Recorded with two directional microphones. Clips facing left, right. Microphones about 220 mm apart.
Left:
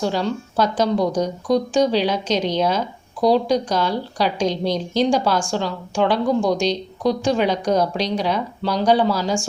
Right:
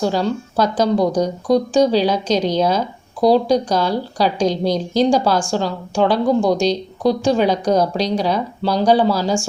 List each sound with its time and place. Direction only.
0.0 s speech: 40° right (ahead or behind)